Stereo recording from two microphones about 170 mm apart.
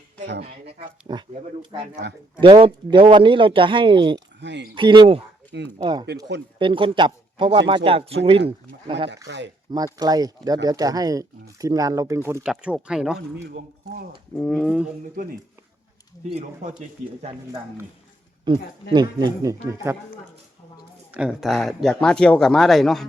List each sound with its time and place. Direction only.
0.6 s speech: 30° right (ahead or behind)
4.4 s speech: 90° right
4.7 s a man's voice: 30° right (ahead or behind)
9.2 s speech: 90° right
9.7 s speech: 20° right (ahead or behind)
12.5 s speech: 5° right (ahead or behind)
13.1 s speech: 80° right
14.3 s speech: 5° left (ahead or behind)
16.3 s speech: 40° right (ahead or behind)
18.4 s speech: 25° right (ahead or behind)
21.1 s speech: 5° right (ahead or behind)